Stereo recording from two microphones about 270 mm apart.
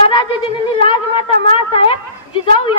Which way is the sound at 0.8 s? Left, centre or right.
Centre.